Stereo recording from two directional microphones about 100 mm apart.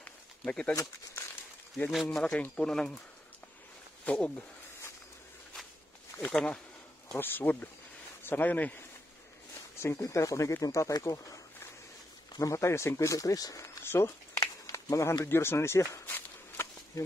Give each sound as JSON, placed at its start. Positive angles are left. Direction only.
{"t": 0.0, "sound": "a sound", "side_deg": 10}
{"t": 2.0, "sound": "speech", "side_deg": 10}
{"t": 4.0, "sound": "speech", "side_deg": 10}
{"t": 6.3, "sound": "speech", "side_deg": 10}
{"t": 7.2, "sound": "speech", "side_deg": 20}
{"t": 9.8, "sound": "speech", "side_deg": 25}
{"t": 16.2, "sound": "a sound", "side_deg": 30}